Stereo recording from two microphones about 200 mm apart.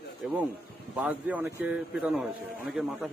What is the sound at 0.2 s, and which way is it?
A man's voice, 5° right (ahead or behind).